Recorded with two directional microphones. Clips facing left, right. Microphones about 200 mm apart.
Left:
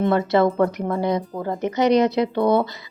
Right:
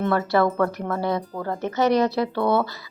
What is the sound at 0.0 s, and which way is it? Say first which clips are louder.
Speech: left 3 dB; 20° left (ahead or behind).